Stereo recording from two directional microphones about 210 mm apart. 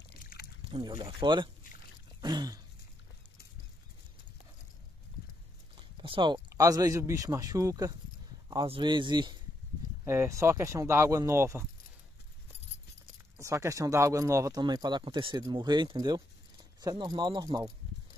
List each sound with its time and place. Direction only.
0.2 s a sound: 45° left (ahead or behind)
0.7 s speech: 25° right (ahead or behind)
5.8 s speech: 25° right (ahead or behind)
13.4 s speech: 15° right (ahead or behind)